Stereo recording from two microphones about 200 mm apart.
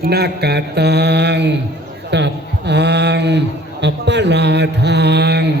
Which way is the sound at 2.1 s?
60° right (ahead or behind).